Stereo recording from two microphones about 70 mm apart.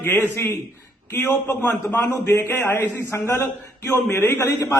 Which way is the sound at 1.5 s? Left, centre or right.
Left.